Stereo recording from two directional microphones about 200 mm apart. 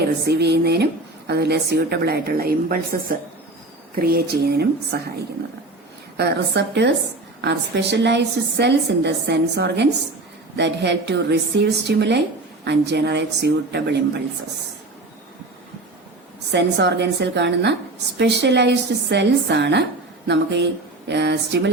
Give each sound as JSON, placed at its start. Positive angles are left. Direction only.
{"t": 0.3, "sound": "a woman's voice", "side_deg": -55}
{"t": 6.1, "sound": "a woman's voice", "side_deg": -60}
{"t": 16.5, "sound": "a woman's voice", "side_deg": -60}